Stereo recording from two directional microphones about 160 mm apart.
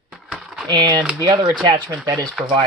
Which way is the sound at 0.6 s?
25° right (ahead or behind).